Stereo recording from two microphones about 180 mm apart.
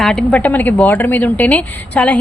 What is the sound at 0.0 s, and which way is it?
A woman's voice, 5° left (ahead or behind).